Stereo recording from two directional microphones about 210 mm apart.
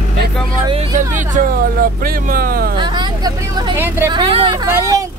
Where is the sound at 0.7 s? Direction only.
35° right (ahead or behind).